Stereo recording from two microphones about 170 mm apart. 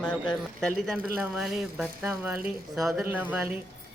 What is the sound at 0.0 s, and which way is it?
Speech, 5° left (ahead or behind).